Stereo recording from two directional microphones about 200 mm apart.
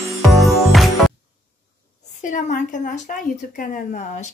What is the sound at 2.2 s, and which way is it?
Speech, 40° left (ahead or behind).